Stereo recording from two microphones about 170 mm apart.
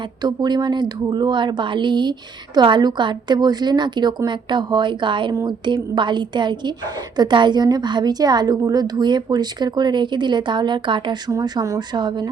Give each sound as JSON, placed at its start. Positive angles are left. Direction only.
{"t": 0.2, "sound": "a woman's voice", "side_deg": -25}